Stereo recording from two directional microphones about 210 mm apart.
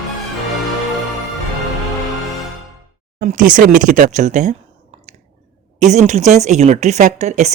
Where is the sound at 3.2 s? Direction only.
40° right (ahead or behind).